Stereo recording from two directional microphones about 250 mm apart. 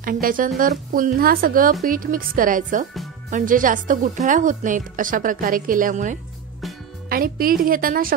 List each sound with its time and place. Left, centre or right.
0.0 s a woman's voice: right